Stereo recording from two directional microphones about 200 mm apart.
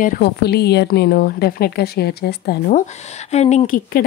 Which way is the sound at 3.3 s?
35° left (ahead or behind).